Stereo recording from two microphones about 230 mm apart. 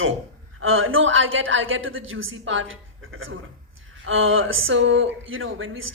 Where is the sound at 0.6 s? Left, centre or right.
Right.